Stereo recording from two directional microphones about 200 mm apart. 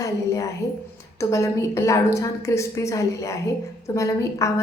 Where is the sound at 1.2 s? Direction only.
15° left (ahead or behind).